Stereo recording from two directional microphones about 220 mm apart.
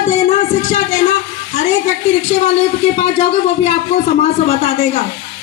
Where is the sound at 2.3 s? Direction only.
30° left (ahead or behind).